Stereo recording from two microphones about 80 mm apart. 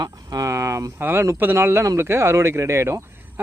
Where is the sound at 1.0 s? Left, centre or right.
Right.